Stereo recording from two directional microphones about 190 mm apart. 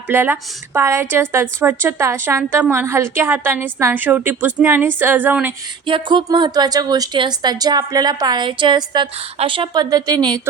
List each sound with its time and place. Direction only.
0.1 s a woman's voice: 10° right (ahead or behind)
5.8 s a woman's voice: 25° right (ahead or behind)